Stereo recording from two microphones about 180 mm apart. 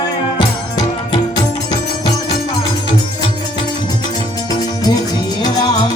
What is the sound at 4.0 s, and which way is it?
Music, 20° left (ahead or behind).